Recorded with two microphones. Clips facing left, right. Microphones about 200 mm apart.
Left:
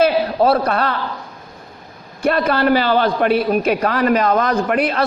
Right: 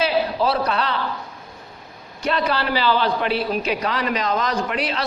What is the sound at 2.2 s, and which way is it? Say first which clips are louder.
A man's voice: left 6 dB; 50° left (ahead or behind).